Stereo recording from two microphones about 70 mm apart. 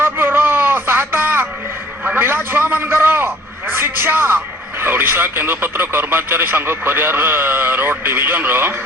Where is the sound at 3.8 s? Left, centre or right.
Right.